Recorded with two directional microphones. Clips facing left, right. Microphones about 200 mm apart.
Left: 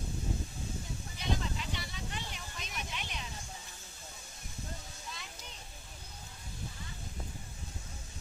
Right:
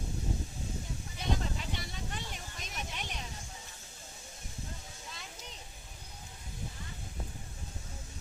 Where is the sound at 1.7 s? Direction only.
45° right (ahead or behind).